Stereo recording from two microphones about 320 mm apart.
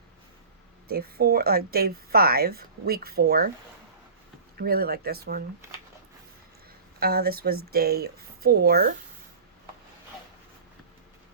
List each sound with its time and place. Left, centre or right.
0.9 s a woman's voice: right
4.6 s a woman's voice: right
7.0 s a woman's voice: right